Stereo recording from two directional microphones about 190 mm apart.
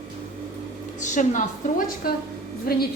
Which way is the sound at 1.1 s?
40° left (ahead or behind).